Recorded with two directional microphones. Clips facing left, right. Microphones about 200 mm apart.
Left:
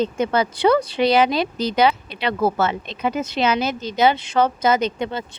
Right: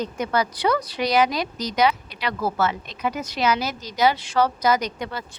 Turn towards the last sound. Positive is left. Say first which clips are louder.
# left 5 dB
turn(degrees=25)  # may be behind; listen again after turning